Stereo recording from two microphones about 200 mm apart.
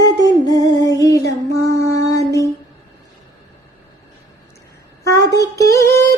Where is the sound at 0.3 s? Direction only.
20° left (ahead or behind).